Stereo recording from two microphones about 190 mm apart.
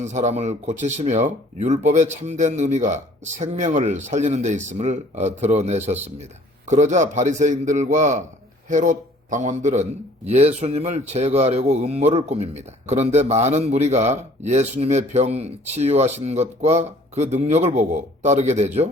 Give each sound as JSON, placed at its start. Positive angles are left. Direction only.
{"t": 0.0, "sound": "a man's voice", "side_deg": -35}